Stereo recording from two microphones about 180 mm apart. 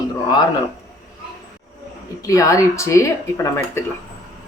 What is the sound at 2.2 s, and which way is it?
Speech, 20° left (ahead or behind).